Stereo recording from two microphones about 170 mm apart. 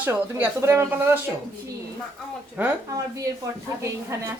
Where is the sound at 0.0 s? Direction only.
10° right (ahead or behind).